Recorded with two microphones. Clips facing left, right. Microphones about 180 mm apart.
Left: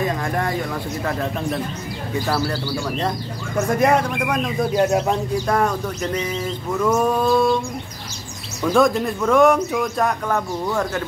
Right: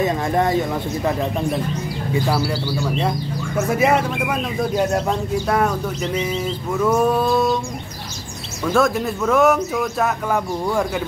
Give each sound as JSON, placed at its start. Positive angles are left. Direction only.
{"t": 0.0, "sound": "speech", "side_deg": -20}
{"t": 2.2, "sound": "speech", "side_deg": -10}
{"t": 8.6, "sound": "speech", "side_deg": 0}